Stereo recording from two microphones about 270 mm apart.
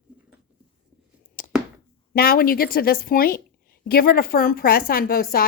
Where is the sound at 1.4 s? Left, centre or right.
Left.